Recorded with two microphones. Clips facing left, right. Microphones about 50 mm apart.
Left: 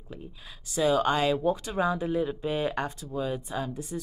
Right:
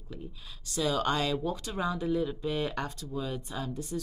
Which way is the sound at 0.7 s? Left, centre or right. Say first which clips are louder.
Left 5 dB; centre.